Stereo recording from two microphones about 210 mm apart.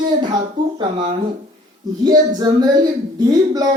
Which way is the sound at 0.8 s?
25° right (ahead or behind).